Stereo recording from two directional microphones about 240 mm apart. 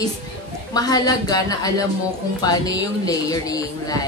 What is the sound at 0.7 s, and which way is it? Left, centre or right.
Speech, centre.